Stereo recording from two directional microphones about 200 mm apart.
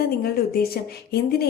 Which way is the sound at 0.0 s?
50° left (ahead or behind).